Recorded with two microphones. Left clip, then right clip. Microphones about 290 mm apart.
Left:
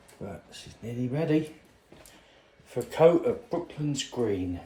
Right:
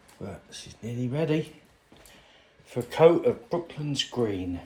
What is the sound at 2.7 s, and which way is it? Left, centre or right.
Speech, right.